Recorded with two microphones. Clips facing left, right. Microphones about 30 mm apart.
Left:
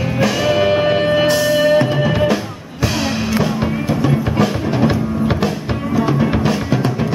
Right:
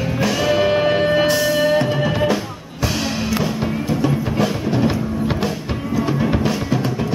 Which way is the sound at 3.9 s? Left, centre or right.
Left.